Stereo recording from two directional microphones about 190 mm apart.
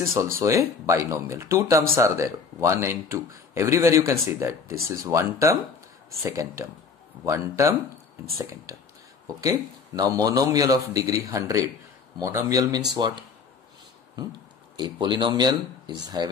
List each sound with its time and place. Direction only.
0.0 s speech: 15° right (ahead or behind)